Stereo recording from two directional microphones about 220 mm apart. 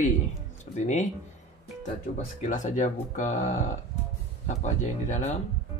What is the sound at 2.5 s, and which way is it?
Speech, 35° left (ahead or behind).